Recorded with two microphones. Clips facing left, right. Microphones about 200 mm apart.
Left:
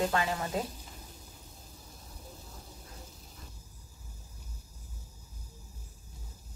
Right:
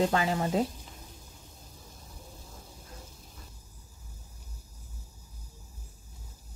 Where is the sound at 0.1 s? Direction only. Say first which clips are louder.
Right 3 dB; 30° right (ahead or behind).